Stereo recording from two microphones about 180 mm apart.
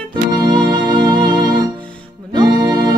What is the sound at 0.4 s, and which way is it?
Music, 25° right (ahead or behind).